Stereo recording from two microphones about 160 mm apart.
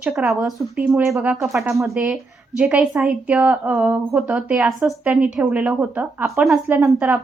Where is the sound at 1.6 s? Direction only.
15° right (ahead or behind).